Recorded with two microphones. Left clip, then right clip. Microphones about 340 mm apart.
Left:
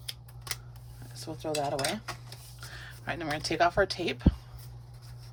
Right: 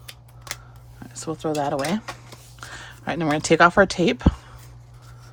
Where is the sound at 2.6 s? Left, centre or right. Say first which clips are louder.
Right 8 dB; centre.